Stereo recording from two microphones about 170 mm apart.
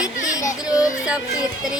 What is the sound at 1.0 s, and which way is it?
Speech, 5° right (ahead or behind).